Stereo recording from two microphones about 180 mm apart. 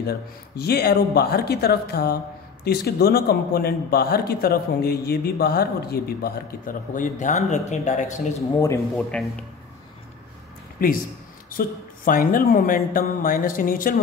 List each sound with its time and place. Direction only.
0.6 s a man's voice: 60° left (ahead or behind); by 8.5 s 40° left (ahead or behind)
8.9 s speech: 5° left (ahead or behind)
10.8 s speech: 55° left (ahead or behind)